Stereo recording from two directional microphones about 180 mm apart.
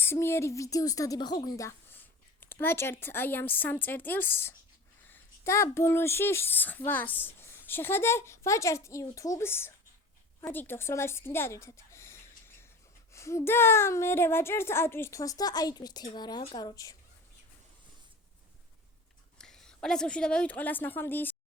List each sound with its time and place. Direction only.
0.0 s speech: 15° left (ahead or behind)
5.0 s a sound: 15° left (ahead or behind)
5.7 s speech: 15° left (ahead or behind)
19.4 s a woman's voice: 5° left (ahead or behind)